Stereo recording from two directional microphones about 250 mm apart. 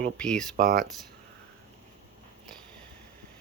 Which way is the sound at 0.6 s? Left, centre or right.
Right.